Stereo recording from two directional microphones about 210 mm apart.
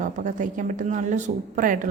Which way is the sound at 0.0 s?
40° right (ahead or behind).